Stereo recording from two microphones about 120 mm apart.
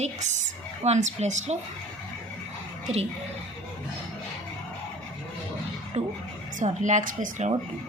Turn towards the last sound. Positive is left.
turn(degrees=-80)